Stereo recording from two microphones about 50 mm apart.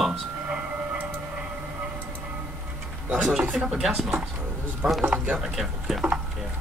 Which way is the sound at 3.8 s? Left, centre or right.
Centre.